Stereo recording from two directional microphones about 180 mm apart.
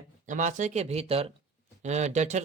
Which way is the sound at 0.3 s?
45° right (ahead or behind).